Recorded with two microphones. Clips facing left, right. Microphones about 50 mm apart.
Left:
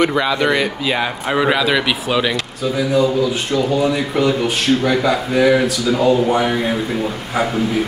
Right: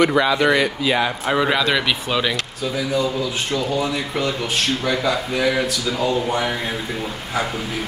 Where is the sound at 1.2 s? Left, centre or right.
Centre.